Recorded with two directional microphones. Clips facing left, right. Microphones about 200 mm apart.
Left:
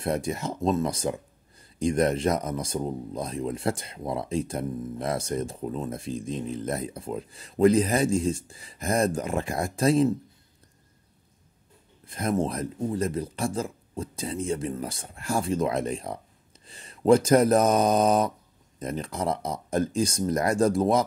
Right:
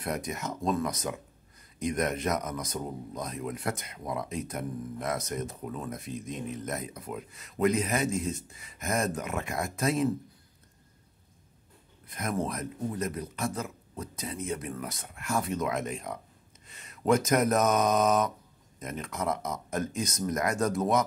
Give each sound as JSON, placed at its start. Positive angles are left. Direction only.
{"t": 0.0, "sound": "speech", "side_deg": 30}
{"t": 12.1, "sound": "speech", "side_deg": 30}